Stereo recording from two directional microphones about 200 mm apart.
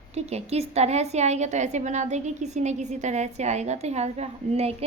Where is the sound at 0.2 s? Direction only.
30° right (ahead or behind).